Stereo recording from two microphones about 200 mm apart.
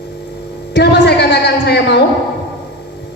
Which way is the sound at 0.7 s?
60° left (ahead or behind).